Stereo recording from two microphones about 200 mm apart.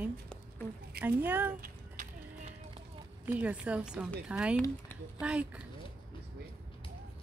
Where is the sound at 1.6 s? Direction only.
40° right (ahead or behind).